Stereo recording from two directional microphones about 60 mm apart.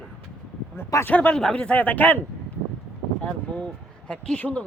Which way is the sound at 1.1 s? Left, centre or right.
Left.